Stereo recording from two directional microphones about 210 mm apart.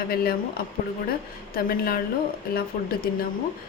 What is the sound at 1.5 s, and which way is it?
Speech, 45° left (ahead or behind).